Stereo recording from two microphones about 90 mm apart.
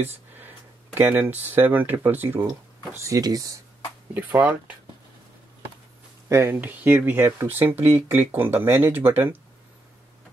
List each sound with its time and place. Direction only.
0.9 s speech: 25° right (ahead or behind)
3.0 s speech: 40° right (ahead or behind)
4.4 s speech: 15° right (ahead or behind)
6.2 s speech: 30° right (ahead or behind)